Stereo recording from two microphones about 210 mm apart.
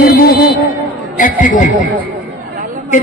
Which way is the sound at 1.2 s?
40° left (ahead or behind).